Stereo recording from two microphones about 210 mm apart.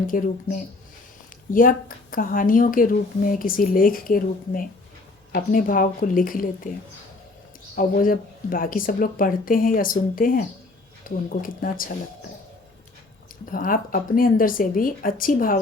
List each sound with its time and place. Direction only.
0.1 s a woman's voice: 40° left (ahead or behind)
1.5 s a woman's voice: 40° left (ahead or behind)
7.8 s a woman's voice: 40° left (ahead or behind)
13.4 s a woman's voice: 40° left (ahead or behind)